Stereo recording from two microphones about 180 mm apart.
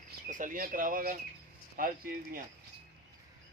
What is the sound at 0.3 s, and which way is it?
Speech, 45° right (ahead or behind).